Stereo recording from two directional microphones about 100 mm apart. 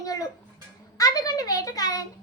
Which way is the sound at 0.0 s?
35° left (ahead or behind).